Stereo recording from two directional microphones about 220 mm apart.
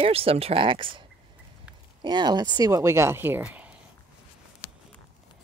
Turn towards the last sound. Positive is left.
turn(degrees=-5)  # may be behind; listen again after turning